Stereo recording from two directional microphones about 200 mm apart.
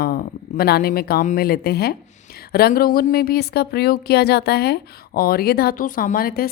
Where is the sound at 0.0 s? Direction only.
45° left (ahead or behind).